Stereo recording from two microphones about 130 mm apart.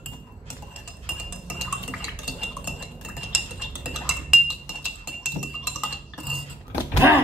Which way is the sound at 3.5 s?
Centre (ahead or behind).